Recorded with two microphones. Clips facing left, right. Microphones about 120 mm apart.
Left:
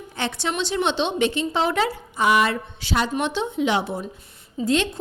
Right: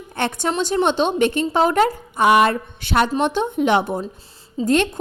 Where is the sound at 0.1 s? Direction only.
50° right (ahead or behind).